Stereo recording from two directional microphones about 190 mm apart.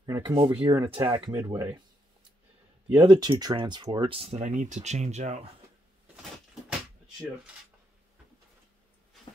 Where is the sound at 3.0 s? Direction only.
25° right (ahead or behind).